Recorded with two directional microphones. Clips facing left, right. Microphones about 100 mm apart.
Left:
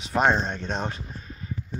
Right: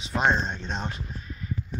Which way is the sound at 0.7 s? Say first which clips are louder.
Left 3 dB; 40° left (ahead or behind).